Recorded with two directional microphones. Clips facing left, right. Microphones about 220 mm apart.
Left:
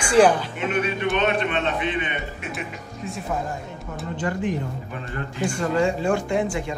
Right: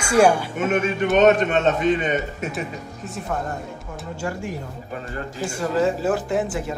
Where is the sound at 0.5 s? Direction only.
45° right (ahead or behind).